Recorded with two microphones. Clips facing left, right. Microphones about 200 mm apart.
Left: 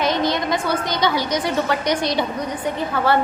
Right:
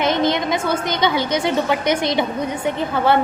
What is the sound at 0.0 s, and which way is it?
A woman's voice, 20° right (ahead or behind).